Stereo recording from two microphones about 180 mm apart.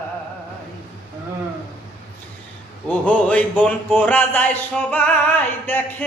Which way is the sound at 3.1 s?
10° left (ahead or behind).